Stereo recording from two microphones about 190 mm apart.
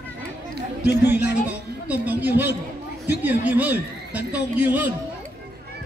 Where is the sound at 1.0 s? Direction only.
10° right (ahead or behind).